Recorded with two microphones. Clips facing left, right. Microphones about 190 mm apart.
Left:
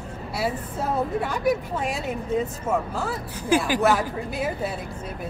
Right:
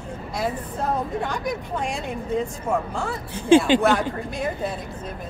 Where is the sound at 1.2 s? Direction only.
5° left (ahead or behind).